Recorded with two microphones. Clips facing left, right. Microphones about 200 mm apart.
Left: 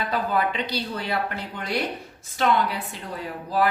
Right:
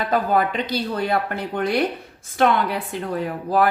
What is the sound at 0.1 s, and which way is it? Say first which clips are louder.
A woman's voice: right 5 dB; 50° right (ahead or behind).